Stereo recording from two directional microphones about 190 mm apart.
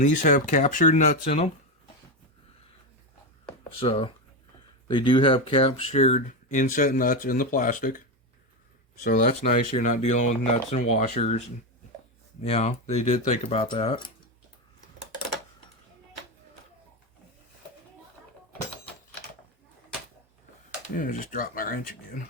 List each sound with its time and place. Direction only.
0.0 s speech: 40° left (ahead or behind)
3.6 s speech: 30° left (ahead or behind)
9.0 s speech: 45° left (ahead or behind); by 14.1 s 30° left (ahead or behind)
20.9 s speech: 45° left (ahead or behind)